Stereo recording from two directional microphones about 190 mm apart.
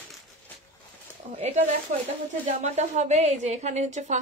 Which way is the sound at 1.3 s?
40° right (ahead or behind).